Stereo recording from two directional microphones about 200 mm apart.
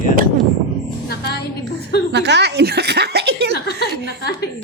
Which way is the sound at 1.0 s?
50° left (ahead or behind).